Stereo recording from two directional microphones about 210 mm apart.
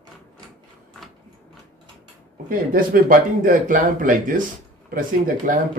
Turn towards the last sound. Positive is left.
turn(degrees=-40)  # may be behind; listen again after turning